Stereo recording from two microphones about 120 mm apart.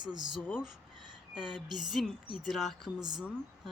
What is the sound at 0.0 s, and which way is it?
Speech, 35° right (ahead or behind).